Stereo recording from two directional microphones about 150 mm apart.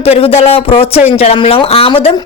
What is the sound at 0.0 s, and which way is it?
A woman's voice, 40° left (ahead or behind).